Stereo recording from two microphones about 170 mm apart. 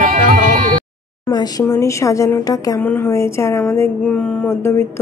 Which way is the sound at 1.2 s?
25° left (ahead or behind).